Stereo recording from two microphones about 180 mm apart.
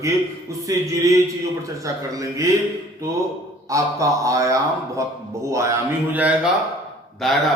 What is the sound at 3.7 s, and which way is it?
A man's voice, 20° right (ahead or behind).